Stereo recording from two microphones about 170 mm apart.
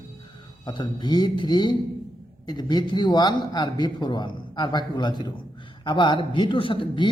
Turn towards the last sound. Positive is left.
turn(degrees=30)  # may be behind; listen again after turning